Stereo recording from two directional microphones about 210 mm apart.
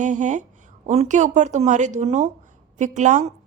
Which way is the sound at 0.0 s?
35° right (ahead or behind).